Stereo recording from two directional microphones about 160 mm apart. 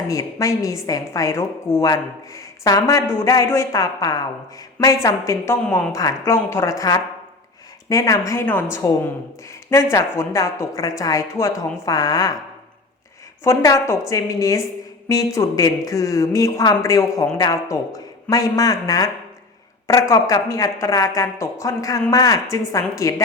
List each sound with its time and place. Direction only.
0.1 s a woman's voice: 20° left (ahead or behind)
13.4 s a woman's voice: 20° left (ahead or behind)